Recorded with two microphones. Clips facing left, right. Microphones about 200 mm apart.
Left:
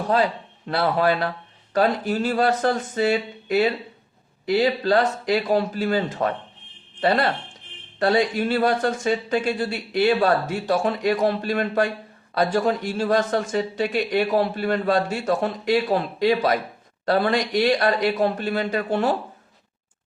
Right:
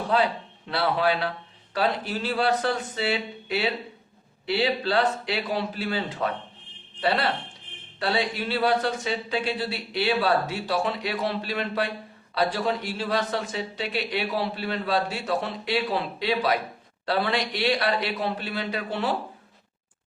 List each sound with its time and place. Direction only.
0.7 s a man's voice: 45° left (ahead or behind)